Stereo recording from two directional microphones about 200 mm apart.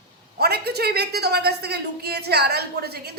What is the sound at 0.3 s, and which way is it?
A woman's voice, 55° right (ahead or behind).